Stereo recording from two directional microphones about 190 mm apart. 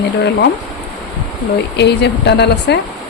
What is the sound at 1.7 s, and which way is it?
Speech, 60° left (ahead or behind).